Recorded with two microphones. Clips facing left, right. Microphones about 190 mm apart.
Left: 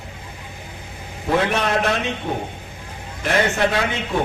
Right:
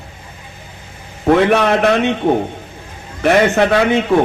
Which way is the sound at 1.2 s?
65° right (ahead or behind).